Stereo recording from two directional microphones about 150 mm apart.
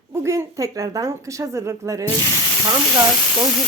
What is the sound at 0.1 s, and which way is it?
Speech, 20° right (ahead or behind).